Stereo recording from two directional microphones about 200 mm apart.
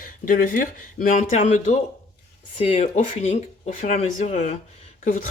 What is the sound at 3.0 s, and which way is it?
Speech, 40° left (ahead or behind).